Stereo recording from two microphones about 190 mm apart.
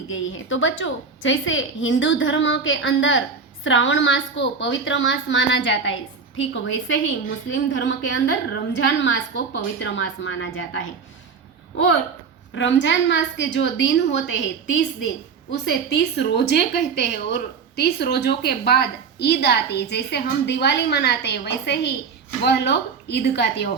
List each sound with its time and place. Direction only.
0.1 s a woman's voice: 90° left
12.5 s a woman's voice: 75° left (ahead or behind)